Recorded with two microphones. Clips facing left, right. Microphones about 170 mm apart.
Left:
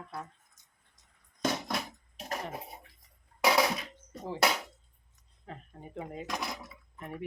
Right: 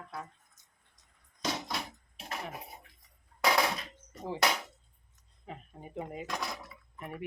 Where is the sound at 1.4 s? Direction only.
45° left (ahead or behind).